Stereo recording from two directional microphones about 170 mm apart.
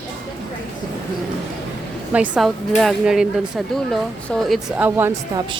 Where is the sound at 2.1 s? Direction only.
5° right (ahead or behind).